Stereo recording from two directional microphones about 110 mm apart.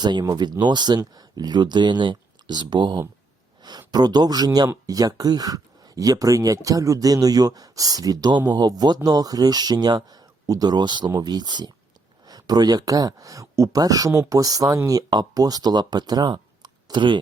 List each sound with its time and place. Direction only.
0.0 s speech: 40° right (ahead or behind)